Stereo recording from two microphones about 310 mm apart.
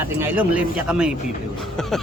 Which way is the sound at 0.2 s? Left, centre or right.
Centre.